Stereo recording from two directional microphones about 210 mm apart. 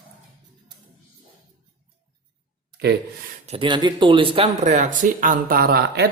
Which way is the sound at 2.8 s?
50° right (ahead or behind).